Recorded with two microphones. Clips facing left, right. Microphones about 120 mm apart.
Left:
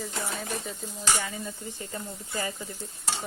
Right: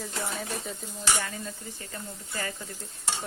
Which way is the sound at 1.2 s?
5° left (ahead or behind).